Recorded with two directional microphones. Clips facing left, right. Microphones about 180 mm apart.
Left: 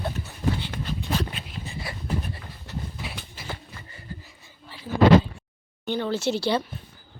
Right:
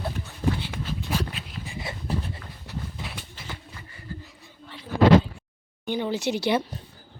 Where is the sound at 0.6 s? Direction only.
5° right (ahead or behind).